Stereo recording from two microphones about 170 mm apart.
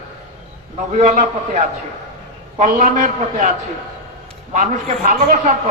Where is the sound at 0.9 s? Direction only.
45° right (ahead or behind).